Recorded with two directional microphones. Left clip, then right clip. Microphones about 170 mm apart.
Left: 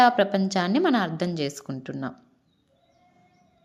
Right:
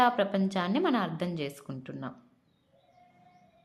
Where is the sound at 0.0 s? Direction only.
20° left (ahead or behind).